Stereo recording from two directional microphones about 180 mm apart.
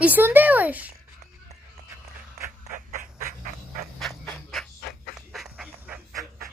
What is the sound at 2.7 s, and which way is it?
Duck, 50° right (ahead or behind).